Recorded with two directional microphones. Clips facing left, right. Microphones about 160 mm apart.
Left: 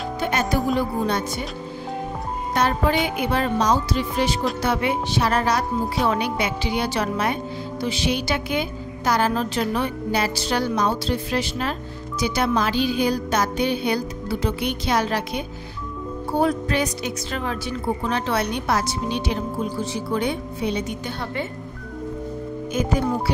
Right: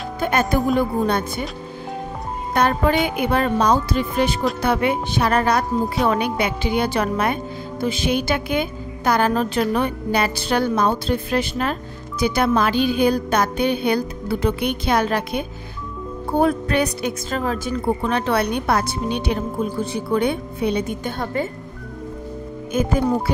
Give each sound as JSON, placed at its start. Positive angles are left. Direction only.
{"t": 0.2, "sound": "a woman's voice", "side_deg": -55}
{"t": 2.5, "sound": "a woman's voice", "side_deg": -55}
{"t": 17.4, "sound": "speech", "side_deg": -40}
{"t": 17.8, "sound": "a woman's voice", "side_deg": -55}
{"t": 22.7, "sound": "a woman's voice", "side_deg": -50}